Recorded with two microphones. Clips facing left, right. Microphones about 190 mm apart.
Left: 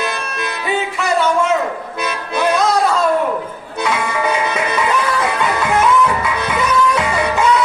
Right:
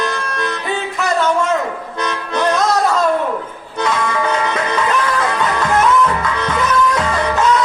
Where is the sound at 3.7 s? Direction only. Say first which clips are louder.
Right 1 dB; 10° left (ahead or behind).